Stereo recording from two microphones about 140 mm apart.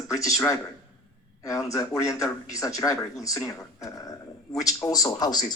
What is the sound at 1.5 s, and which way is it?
Speech, 25° left (ahead or behind).